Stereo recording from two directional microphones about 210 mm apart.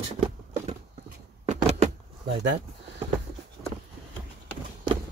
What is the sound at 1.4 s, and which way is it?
Vehicle, 35° right (ahead or behind).